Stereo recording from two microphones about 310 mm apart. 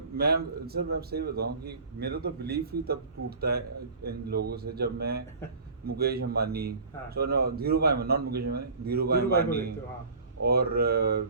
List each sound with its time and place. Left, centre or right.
0.2 s a man's voice: right